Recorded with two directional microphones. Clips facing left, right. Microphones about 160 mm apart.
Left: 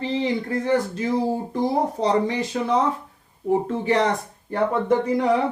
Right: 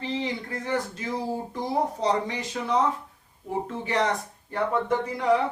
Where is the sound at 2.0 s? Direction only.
30° left (ahead or behind).